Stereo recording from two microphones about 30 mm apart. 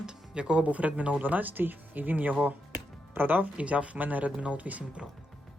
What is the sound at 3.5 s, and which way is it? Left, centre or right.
Speech, right.